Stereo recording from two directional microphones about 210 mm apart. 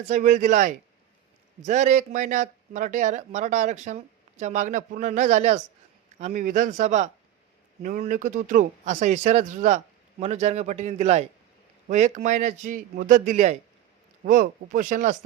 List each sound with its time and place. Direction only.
0.1 s speech: 35° right (ahead or behind)